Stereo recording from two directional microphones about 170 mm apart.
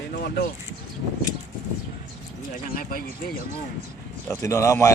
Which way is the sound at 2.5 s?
55° left (ahead or behind).